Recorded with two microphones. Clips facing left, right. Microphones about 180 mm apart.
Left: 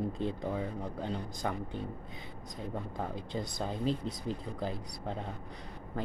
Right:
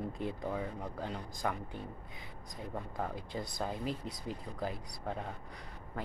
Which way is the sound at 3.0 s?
25° left (ahead or behind).